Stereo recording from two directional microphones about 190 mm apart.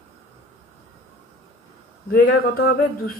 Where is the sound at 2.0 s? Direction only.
50° left (ahead or behind).